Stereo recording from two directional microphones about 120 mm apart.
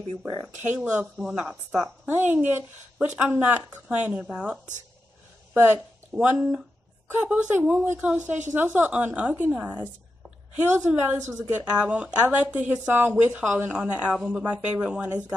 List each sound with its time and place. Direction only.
0.6 s a woman's voice: 15° right (ahead or behind)
1.1 s a woman's voice: 5° right (ahead or behind)